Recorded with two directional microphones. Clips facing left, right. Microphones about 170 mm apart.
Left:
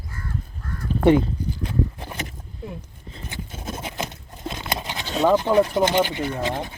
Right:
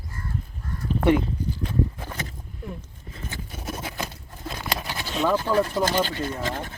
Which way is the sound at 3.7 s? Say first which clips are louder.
Left 3 dB; 20° left (ahead or behind).